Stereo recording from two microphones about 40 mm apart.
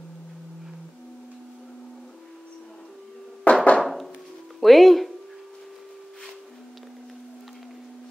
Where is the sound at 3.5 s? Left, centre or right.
Left.